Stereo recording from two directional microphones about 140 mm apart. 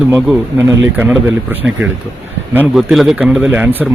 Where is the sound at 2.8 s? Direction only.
Centre (ahead or behind).